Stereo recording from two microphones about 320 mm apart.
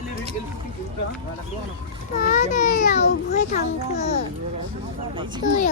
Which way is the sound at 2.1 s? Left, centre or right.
Left.